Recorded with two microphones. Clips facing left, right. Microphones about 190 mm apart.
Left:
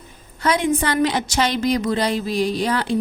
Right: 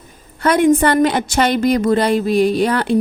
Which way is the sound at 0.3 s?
55° right (ahead or behind).